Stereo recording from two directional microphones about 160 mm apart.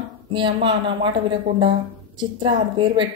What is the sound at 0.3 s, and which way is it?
Speech, 30° right (ahead or behind).